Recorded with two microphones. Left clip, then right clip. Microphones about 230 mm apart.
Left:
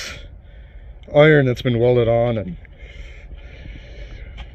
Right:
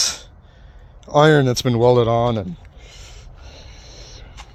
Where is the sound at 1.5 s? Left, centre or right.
Right.